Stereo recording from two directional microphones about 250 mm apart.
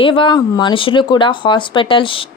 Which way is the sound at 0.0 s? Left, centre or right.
Centre.